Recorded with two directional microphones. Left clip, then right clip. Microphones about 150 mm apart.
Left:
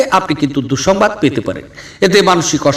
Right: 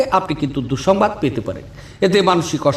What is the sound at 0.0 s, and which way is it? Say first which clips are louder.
A man's voice: left 4 dB; 25° left (ahead or behind).